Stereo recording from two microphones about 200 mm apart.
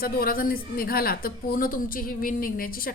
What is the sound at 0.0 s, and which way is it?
A man's voice, 45° left (ahead or behind).